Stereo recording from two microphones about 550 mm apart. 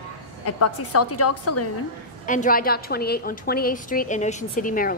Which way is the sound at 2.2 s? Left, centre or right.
Centre.